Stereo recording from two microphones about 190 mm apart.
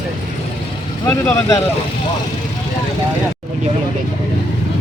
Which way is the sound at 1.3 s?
15° left (ahead or behind).